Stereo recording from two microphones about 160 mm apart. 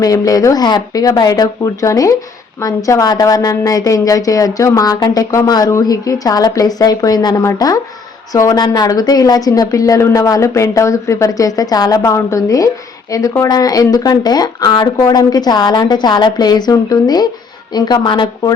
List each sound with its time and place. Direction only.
0.0 s a woman's voice: 20° left (ahead or behind)